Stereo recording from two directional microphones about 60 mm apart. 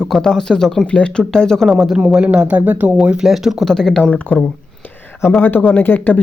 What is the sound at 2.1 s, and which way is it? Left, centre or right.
Speech, centre.